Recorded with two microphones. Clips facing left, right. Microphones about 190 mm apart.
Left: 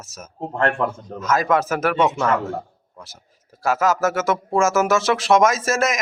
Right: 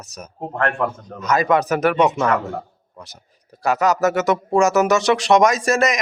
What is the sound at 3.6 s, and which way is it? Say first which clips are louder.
Speech: right 2 dB; centre (ahead or behind).